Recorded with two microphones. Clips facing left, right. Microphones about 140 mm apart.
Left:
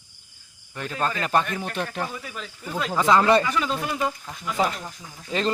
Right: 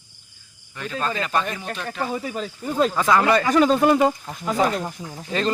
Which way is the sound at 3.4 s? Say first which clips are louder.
Right 8 dB; 45° right (ahead or behind).